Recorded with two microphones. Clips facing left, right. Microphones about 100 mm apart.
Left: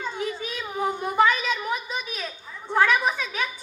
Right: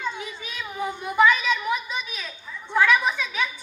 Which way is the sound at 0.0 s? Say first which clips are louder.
Left 2 dB; 40° left (ahead or behind).